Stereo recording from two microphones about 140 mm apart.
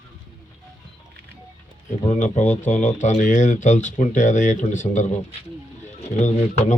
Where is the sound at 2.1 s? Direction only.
60° left (ahead or behind).